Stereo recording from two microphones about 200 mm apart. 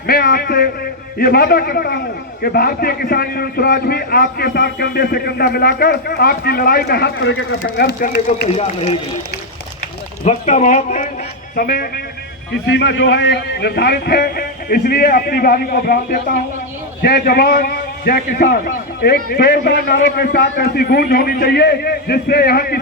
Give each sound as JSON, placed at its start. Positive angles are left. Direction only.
{"t": 0.1, "sound": "a man's voice", "side_deg": 50}
{"t": 7.6, "sound": "a man's voice", "side_deg": 50}
{"t": 8.5, "sound": "speech", "side_deg": 35}
{"t": 10.2, "sound": "a man's voice", "side_deg": 35}
{"t": 12.6, "sound": "a man's voice", "side_deg": 60}